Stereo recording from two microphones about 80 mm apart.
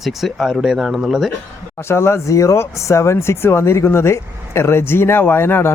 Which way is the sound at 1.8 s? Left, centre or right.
Left.